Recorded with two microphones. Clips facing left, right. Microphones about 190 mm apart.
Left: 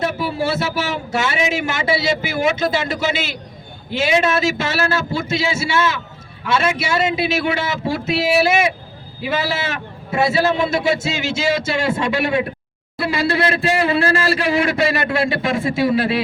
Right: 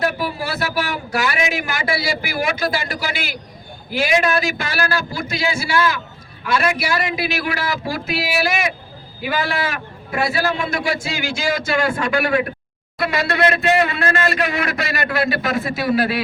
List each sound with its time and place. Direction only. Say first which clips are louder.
0.0 s a man's voice: left 2 dB; 25° left (ahead or behind)